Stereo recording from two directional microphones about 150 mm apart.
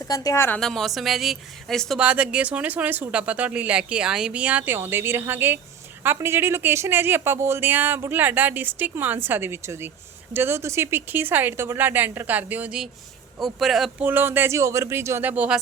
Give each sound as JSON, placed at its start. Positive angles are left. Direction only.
{"t": 0.0, "sound": "a woman's voice", "side_deg": 25}
{"t": 0.6, "sound": "speech", "side_deg": 0}
{"t": 14.1, "sound": "speech", "side_deg": -15}